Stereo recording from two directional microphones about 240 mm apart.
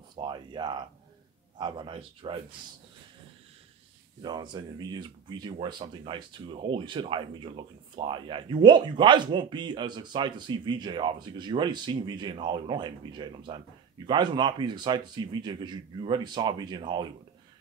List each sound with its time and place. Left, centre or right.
0.1 s a man's voice: centre
4.2 s a man's voice: centre